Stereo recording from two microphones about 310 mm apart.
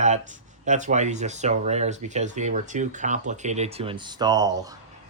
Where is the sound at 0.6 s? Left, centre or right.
Right.